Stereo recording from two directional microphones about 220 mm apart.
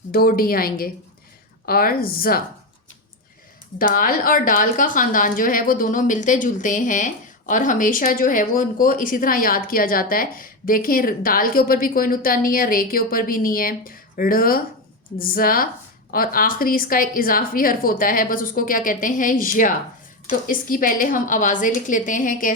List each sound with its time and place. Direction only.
0.1 s speech: 45° left (ahead or behind)
3.8 s speech: 40° left (ahead or behind)